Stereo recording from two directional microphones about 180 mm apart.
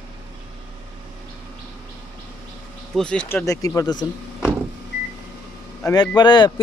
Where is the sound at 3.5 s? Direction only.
20° left (ahead or behind).